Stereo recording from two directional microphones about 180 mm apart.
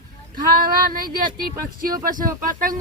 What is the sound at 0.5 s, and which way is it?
Speech, 55° right (ahead or behind).